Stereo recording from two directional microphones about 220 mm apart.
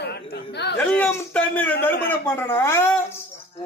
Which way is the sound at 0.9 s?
5° left (ahead or behind).